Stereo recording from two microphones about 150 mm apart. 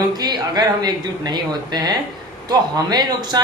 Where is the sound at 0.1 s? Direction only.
25° right (ahead or behind).